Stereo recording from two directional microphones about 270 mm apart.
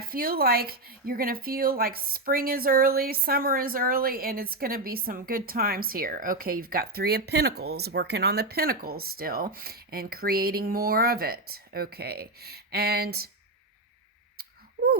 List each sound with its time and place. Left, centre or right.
0.0 s speech: right